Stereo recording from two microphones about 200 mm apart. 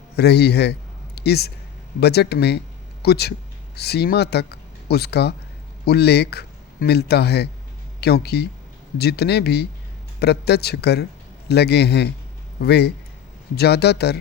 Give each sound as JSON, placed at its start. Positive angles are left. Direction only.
{"t": 0.2, "sound": "a man's voice", "side_deg": 55}